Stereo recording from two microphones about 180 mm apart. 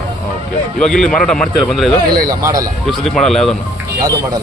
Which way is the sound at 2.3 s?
20° right (ahead or behind).